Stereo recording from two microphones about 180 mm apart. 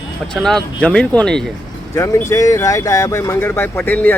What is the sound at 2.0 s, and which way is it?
Speech, 15° left (ahead or behind).